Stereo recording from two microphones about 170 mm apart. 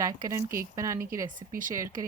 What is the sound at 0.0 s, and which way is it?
A woman's voice, 20° right (ahead or behind).